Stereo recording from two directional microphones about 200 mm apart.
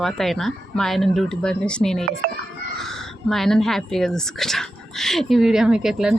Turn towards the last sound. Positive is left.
turn(degrees=-5)  # may be behind; listen again after turning